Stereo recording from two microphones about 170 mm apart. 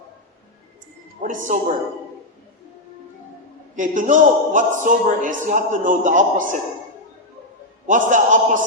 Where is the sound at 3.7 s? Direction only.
50° right (ahead or behind).